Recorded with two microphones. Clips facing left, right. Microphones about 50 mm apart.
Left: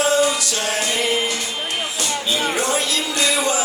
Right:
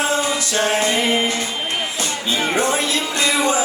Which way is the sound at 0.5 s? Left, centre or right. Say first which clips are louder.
Right 4 dB; right.